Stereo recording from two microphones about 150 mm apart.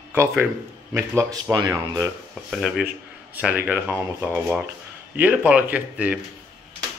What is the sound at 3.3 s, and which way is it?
A man's voice, 10° right (ahead or behind).